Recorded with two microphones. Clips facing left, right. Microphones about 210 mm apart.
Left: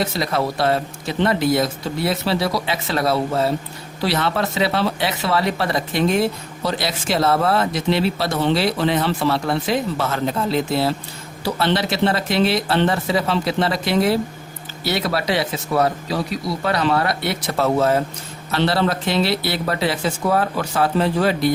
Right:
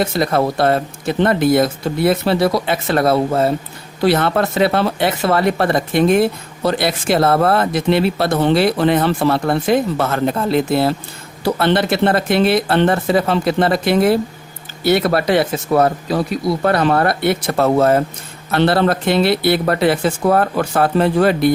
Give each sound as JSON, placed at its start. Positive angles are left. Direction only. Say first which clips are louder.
{"t": 0.0, "sound": "speech", "louder": "right 5 dB", "side_deg": -50}